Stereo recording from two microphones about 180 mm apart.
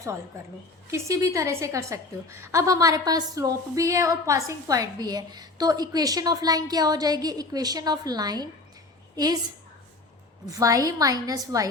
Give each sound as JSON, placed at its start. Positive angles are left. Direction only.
{"t": 0.9, "sound": "a woman's voice", "side_deg": -15}
{"t": 10.5, "sound": "a woman's voice", "side_deg": -20}